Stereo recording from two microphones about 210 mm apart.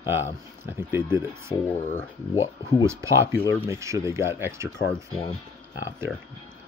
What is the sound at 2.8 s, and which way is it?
Speech, 15° right (ahead or behind).